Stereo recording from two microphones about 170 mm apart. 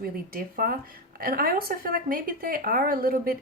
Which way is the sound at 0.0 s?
60° right (ahead or behind).